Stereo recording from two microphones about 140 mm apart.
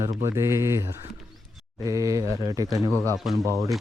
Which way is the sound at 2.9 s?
15° left (ahead or behind).